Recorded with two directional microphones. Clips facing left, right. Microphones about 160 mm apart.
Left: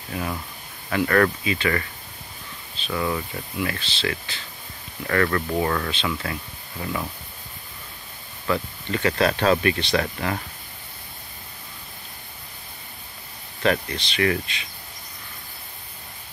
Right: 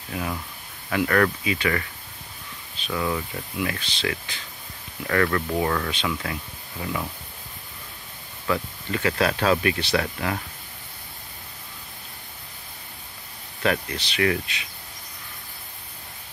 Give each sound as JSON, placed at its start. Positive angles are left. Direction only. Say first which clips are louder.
{"t": 0.1, "sound": "speech", "louder": "left 1 dB", "side_deg": 0}
{"t": 2.9, "sound": "speech", "louder": "left 1 dB", "side_deg": 5}
{"t": 3.5, "sound": "speech", "louder": "even", "side_deg": -10}
{"t": 5.0, "sound": "speech", "louder": "even", "side_deg": -5}
{"t": 6.2, "sound": "speech", "louder": "left 1 dB", "side_deg": -10}
{"t": 6.8, "sound": "speech", "louder": "left 1 dB", "side_deg": 0}
{"t": 8.5, "sound": "speech", "louder": "left 1 dB", "side_deg": -5}
{"t": 13.6, "sound": "speech", "louder": "left 2 dB", "side_deg": -10}